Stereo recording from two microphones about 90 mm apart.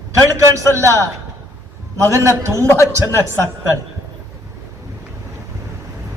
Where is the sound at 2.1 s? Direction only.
35° right (ahead or behind).